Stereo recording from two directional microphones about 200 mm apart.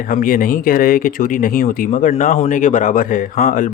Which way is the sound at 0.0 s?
45° left (ahead or behind).